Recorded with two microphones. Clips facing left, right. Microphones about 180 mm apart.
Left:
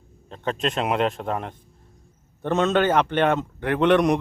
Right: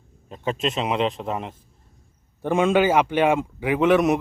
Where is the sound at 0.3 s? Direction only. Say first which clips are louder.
Right 1 dB; 5° right (ahead or behind).